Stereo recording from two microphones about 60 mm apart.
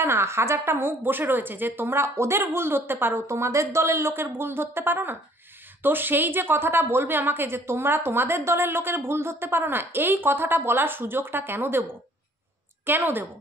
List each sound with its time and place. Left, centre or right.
0.0 s a woman's voice: right